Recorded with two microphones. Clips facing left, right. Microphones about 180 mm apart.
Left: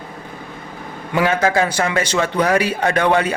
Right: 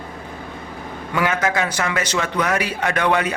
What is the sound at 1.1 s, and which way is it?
A man's voice, 30° left (ahead or behind).